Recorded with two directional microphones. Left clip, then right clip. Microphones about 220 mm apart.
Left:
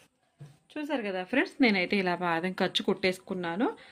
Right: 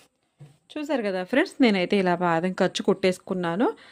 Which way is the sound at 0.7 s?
55° right (ahead or behind).